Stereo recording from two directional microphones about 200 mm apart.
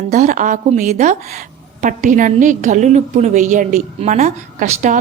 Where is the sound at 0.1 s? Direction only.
40° right (ahead or behind).